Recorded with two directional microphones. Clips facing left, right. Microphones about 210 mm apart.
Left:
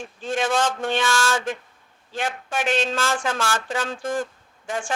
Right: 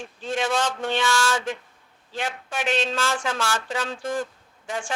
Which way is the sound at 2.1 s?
50° left (ahead or behind).